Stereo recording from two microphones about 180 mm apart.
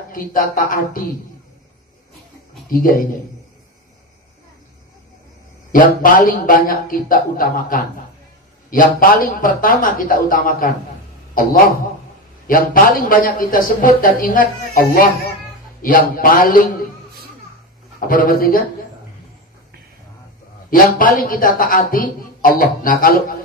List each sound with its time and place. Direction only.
0.1 s a man's voice: 50° left (ahead or behind)
2.7 s a man's voice: 55° left (ahead or behind)
5.7 s a man's voice: 50° left (ahead or behind)
12.4 s a man's voice: 50° left (ahead or behind)
18.0 s a man's voice: 50° left (ahead or behind)
20.7 s a man's voice: 50° left (ahead or behind)